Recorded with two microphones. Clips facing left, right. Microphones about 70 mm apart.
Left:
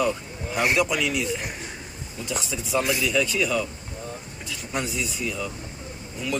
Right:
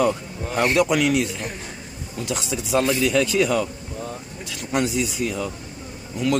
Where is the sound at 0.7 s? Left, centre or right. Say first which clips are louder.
Right 5 dB; right.